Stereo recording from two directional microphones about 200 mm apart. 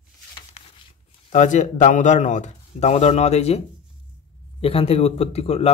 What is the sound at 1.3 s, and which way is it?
Speech, 40° left (ahead or behind).